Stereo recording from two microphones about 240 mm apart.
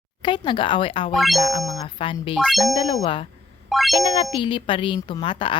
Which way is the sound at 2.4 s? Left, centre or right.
Centre.